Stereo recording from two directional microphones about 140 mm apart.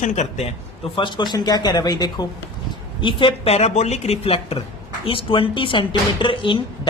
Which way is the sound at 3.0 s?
40° left (ahead or behind).